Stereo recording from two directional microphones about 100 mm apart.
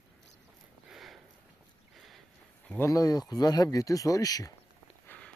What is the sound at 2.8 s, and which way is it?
Speech, 35° left (ahead or behind).